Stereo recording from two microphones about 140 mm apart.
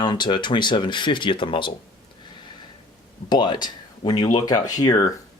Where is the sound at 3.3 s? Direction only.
30° left (ahead or behind).